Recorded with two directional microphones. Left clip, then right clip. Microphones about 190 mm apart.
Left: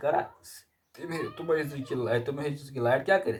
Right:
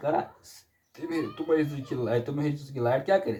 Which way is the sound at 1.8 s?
20° left (ahead or behind).